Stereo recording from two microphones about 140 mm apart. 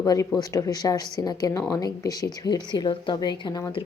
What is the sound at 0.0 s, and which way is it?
Speech, 25° left (ahead or behind).